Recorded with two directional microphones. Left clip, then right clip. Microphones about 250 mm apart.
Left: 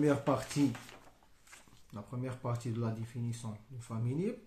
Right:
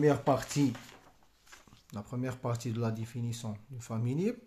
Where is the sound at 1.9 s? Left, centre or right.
Right.